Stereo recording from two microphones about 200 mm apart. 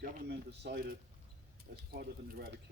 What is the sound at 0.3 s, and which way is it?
Speech, 55° right (ahead or behind).